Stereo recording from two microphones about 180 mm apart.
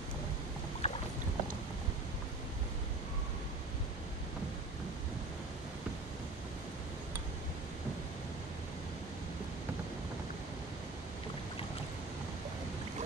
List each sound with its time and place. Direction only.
0.8 s boat: 35° left (ahead or behind)